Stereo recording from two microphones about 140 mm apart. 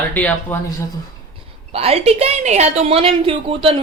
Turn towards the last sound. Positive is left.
turn(degrees=-40)  # may be behind; listen again after turning